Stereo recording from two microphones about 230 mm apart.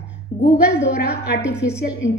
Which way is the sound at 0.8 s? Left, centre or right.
Left.